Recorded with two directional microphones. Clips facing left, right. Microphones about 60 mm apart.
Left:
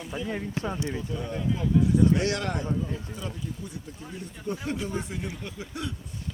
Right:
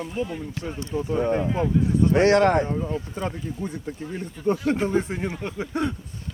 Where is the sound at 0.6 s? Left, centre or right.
Left.